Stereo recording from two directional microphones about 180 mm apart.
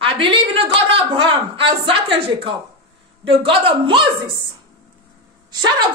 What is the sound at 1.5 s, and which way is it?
Speech, 30° right (ahead or behind).